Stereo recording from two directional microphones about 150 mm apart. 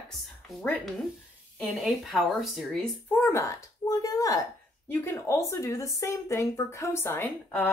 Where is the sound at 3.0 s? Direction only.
15° left (ahead or behind).